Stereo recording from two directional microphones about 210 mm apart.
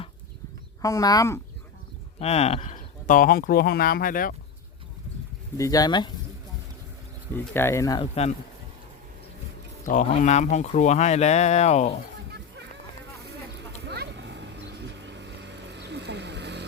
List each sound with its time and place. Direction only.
0.8 s speech: 15° left (ahead or behind)
2.1 s speech: 30° left (ahead or behind)
5.5 s speech: 15° left (ahead or behind)
7.3 s speech: 10° left (ahead or behind)
9.8 s speech: 35° left (ahead or behind)
13.8 s vehicle: 55° right (ahead or behind)